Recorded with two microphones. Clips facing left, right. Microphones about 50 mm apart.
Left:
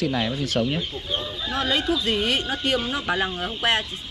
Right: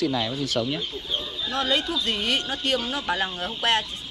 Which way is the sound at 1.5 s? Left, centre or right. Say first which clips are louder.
Left 2 dB; centre.